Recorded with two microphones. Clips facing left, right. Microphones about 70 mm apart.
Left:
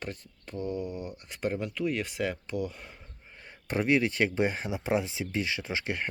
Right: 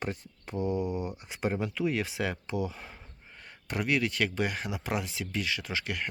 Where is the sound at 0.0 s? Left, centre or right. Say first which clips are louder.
Right 3 dB; centre.